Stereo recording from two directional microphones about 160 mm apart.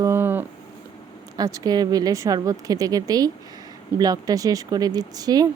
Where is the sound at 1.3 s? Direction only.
25° right (ahead or behind).